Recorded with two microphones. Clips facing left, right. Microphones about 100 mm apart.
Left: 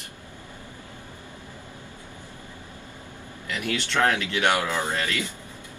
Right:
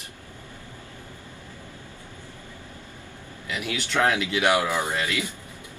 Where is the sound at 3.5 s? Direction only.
10° right (ahead or behind).